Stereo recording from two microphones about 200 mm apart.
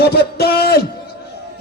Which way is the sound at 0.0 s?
55° left (ahead or behind).